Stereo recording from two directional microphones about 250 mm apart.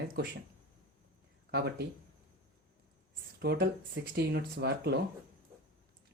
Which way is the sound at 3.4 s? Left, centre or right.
Right.